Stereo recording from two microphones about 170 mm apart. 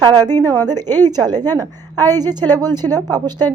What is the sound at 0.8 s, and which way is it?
Speech, 10° left (ahead or behind).